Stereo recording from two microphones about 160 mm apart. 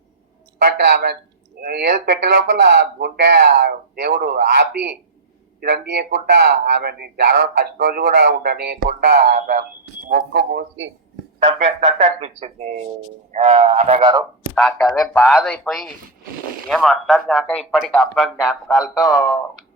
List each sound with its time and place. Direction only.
0.6 s a man's voice: 85° right
5.5 s speech: 85° right
11.6 s speech: 40° right (ahead or behind)
14.5 s speech: centre (ahead or behind)